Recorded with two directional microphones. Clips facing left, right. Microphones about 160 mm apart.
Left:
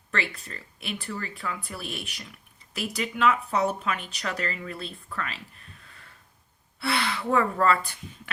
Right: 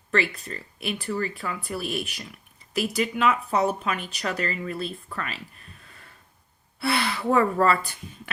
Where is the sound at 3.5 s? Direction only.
25° right (ahead or behind).